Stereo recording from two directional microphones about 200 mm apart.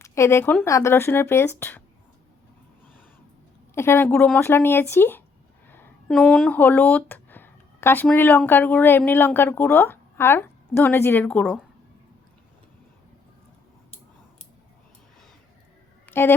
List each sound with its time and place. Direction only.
0.0 s speech: 15° left (ahead or behind)
3.8 s speech: 10° left (ahead or behind)
16.0 s a sound: 10° left (ahead or behind)